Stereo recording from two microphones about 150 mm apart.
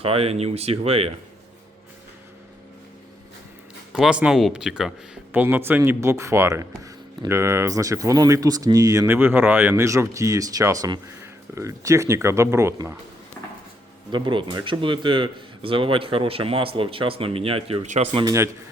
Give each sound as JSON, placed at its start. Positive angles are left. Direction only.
{"t": 0.0, "sound": "speech", "side_deg": -40}
{"t": 3.9, "sound": "speech", "side_deg": -5}
{"t": 14.1, "sound": "speech", "side_deg": -30}
{"t": 17.8, "sound": "speech", "side_deg": -55}
{"t": 18.1, "sound": "speech", "side_deg": -35}